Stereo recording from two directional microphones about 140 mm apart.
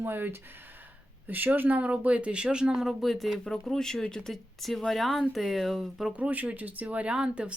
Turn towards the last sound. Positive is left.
turn(degrees=-5)  # may be behind; listen again after turning